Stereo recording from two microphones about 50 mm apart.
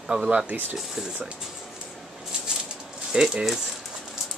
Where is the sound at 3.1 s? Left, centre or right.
Centre.